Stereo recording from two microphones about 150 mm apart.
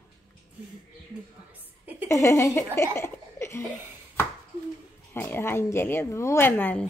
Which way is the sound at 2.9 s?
15° left (ahead or behind).